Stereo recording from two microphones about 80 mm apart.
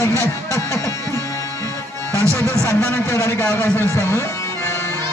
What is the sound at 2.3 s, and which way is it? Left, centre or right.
A man's voice, left.